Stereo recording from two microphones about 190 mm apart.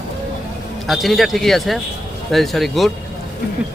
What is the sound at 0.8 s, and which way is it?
Speech, centre (ahead or behind).